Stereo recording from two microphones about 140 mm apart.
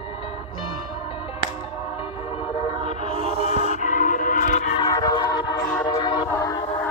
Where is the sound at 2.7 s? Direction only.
55° left (ahead or behind).